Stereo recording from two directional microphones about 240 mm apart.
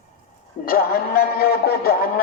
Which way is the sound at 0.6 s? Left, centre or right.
Left.